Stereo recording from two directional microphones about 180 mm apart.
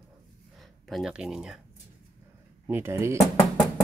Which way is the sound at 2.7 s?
15° right (ahead or behind).